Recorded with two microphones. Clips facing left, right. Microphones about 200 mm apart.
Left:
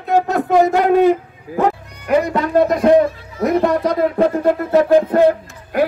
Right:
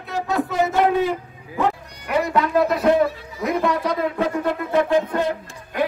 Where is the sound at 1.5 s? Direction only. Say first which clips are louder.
Left 5 dB; 50° left (ahead or behind).